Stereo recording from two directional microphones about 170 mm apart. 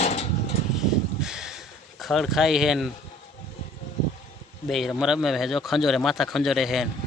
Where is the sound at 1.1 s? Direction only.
5° right (ahead or behind).